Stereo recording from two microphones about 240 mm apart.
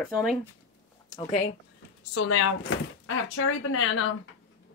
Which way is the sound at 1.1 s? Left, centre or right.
Left.